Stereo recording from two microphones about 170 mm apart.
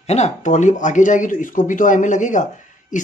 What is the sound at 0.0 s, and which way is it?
Speech, 40° left (ahead or behind).